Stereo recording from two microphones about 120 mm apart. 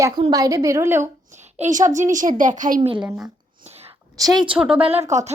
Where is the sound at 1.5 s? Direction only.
75° right (ahead or behind).